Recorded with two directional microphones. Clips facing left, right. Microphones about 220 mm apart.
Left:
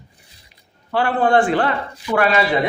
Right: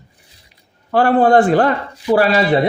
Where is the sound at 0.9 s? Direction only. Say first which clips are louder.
Right 5 dB; 40° right (ahead or behind).